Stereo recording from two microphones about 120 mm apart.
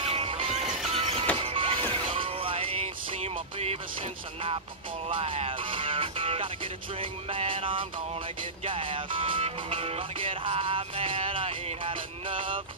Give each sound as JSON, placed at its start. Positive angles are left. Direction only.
{"t": 0.1, "sound": "music", "side_deg": -50}
{"t": 5.1, "sound": "speech", "side_deg": -50}